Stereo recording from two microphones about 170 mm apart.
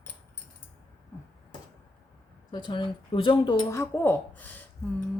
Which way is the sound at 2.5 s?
30° left (ahead or behind).